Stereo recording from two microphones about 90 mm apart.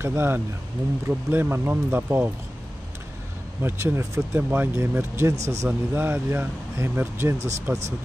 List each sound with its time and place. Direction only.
0.0 s speech: 25° right (ahead or behind)
3.6 s speech: 30° right (ahead or behind)
5.7 s speech: 25° right (ahead or behind)